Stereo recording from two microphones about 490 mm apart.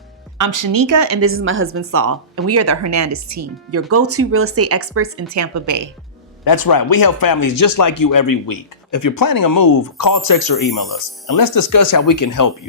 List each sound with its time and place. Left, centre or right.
0.3 s speech: right
6.4 s speech: left